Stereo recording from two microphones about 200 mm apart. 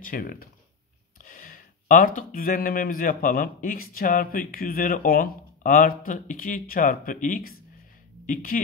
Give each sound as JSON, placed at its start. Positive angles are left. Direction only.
{"t": 0.0, "sound": "speech", "side_deg": 45}